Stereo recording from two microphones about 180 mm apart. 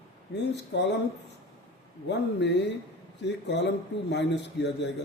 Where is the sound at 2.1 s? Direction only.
75° left (ahead or behind).